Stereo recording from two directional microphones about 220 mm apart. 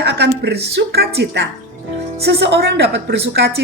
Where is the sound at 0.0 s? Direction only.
50° right (ahead or behind).